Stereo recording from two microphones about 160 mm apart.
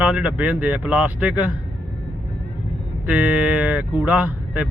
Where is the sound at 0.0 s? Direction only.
10° right (ahead or behind).